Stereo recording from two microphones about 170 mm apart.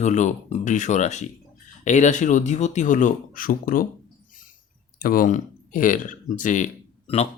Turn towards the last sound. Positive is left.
turn(degrees=35)  # may be behind; listen again after turning